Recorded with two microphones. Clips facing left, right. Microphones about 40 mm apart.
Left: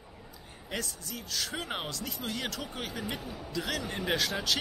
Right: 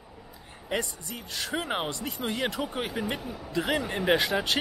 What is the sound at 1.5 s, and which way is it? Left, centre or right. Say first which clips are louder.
Speech: right 6 dB; centre.